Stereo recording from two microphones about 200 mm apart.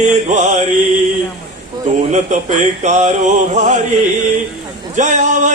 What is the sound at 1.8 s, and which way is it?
Music, 35° right (ahead or behind).